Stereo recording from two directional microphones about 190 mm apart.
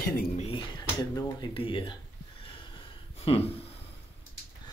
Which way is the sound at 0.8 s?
20° left (ahead or behind).